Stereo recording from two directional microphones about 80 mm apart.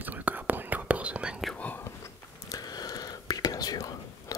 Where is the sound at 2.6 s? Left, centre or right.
Left.